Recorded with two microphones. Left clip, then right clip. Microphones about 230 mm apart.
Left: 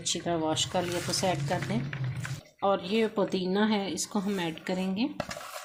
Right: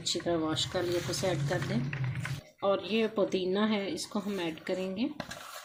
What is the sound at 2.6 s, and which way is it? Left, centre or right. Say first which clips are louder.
Speech: left 2 dB; left.